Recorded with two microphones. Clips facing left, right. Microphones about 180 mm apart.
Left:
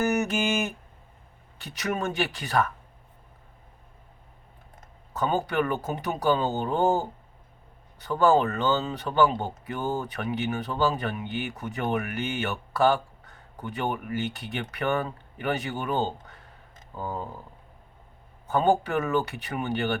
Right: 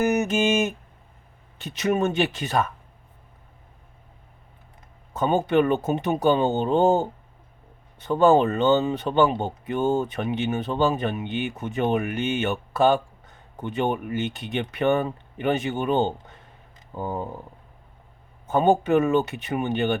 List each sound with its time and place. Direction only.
0.0 s speech: 20° right (ahead or behind)
5.1 s speech: 20° right (ahead or behind)
18.4 s speech: 20° right (ahead or behind)